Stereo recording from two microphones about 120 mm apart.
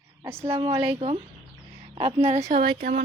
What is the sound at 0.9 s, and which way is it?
A woman's voice, 50° right (ahead or behind).